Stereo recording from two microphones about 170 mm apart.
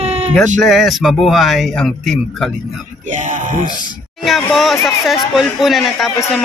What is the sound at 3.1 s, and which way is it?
Speech, 50° right (ahead or behind).